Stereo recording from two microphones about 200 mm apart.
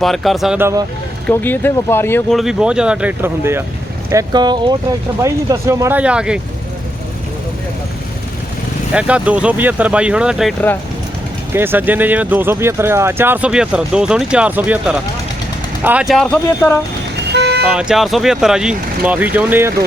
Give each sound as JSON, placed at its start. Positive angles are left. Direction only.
{"t": 0.0, "sound": "speech", "side_deg": 0}
{"t": 1.3, "sound": "speech", "side_deg": 10}
{"t": 2.3, "sound": "speech", "side_deg": 0}
{"t": 8.9, "sound": "speech", "side_deg": -5}
{"t": 11.5, "sound": "speech", "side_deg": -10}
{"t": 17.3, "sound": "vehicle", "side_deg": -55}
{"t": 17.7, "sound": "speech", "side_deg": -5}